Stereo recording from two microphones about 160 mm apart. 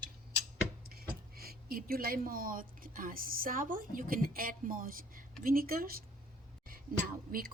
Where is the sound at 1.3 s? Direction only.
70° right (ahead or behind).